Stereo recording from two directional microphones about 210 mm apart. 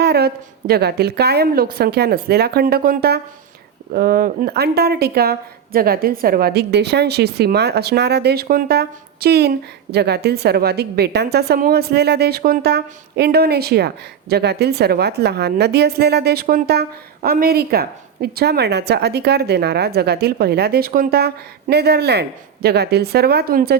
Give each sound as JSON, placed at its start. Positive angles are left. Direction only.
{"t": 0.0, "sound": "speech", "side_deg": -50}